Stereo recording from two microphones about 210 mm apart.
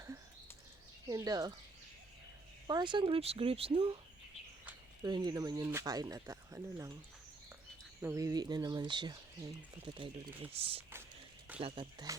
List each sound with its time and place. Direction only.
1.0 s speech: 20° right (ahead or behind)
2.6 s speech: 20° right (ahead or behind)
5.0 s speech: 20° right (ahead or behind)
8.0 s speech: 15° right (ahead or behind)